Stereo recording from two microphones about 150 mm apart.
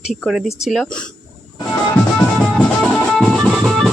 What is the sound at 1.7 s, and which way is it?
Music, 10° left (ahead or behind).